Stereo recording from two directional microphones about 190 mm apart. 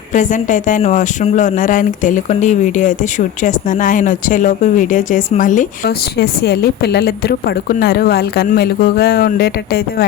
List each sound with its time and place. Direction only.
0.1 s speech: 40° left (ahead or behind)
6.1 s a woman's voice: 55° left (ahead or behind)